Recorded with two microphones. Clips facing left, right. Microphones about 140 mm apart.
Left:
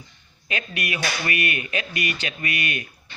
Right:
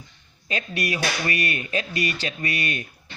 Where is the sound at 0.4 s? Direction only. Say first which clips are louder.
Right 2 dB; 35° right (ahead or behind).